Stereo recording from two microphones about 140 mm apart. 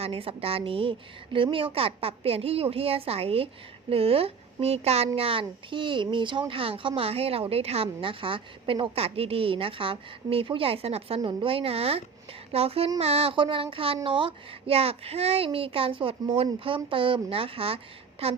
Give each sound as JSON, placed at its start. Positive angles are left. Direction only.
{"t": 0.0, "sound": "a woman's voice", "side_deg": -45}